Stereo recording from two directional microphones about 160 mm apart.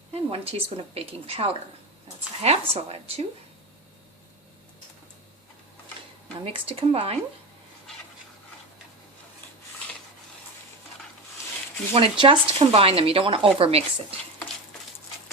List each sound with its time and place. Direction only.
0.1 s speech: 40° right (ahead or behind)
6.4 s speech: 35° right (ahead or behind)
11.9 s speech: 35° right (ahead or behind)